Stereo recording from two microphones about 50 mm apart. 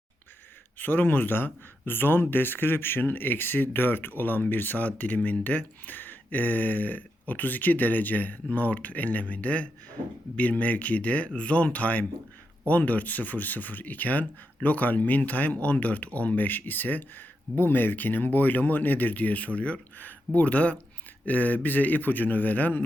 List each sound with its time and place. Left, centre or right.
0.8 s speech: left